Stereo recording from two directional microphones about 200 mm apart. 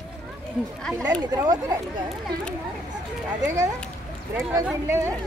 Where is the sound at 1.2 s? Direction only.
20° right (ahead or behind).